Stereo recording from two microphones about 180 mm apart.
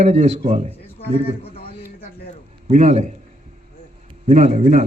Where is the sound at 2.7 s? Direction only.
40° right (ahead or behind).